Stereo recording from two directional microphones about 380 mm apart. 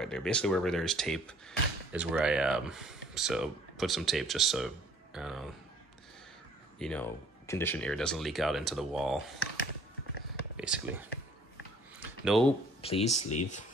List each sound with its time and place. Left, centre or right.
0.0 s speech: centre
6.8 s speech: centre
10.6 s speech: centre
12.0 s a sound: centre
12.8 s speech: centre
13.2 s speech: left